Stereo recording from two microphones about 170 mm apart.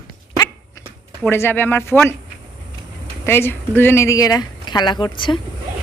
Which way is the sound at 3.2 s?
15° left (ahead or behind).